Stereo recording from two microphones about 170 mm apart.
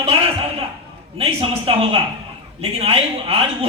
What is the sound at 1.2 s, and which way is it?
Speech, 35° right (ahead or behind).